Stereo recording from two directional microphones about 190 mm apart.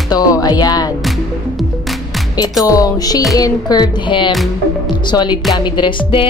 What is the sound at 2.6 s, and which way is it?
Speech, 20° left (ahead or behind).